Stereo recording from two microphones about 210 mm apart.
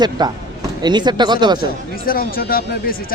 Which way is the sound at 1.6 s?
45° left (ahead or behind).